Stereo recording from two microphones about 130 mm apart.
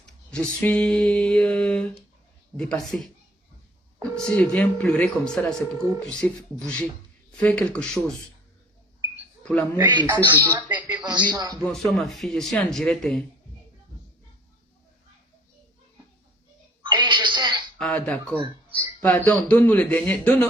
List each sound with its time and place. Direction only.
0.0 s mantra: 5° left (ahead or behind)
2.9 s speech: 10° left (ahead or behind)
4.1 s speech: 5° left (ahead or behind)
9.4 s speech: 5° left (ahead or behind)
9.8 s speech: 35° right (ahead or behind)
10.4 s speech: 20° right (ahead or behind)
11.0 s speech: 35° right (ahead or behind)
11.6 s speech: 5° left (ahead or behind)
16.8 s television: 35° right (ahead or behind)
17.7 s speech: 10° left (ahead or behind)